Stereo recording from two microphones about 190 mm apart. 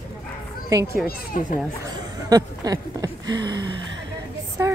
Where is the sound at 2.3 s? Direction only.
20° right (ahead or behind).